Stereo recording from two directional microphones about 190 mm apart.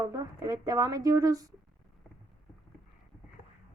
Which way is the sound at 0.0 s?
15° right (ahead or behind).